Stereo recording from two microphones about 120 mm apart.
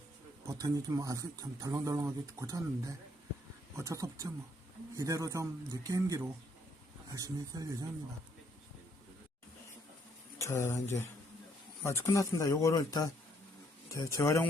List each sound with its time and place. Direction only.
0.4 s speech: 30° right (ahead or behind)
3.8 s speech: 25° right (ahead or behind)
10.3 s speech: 25° left (ahead or behind)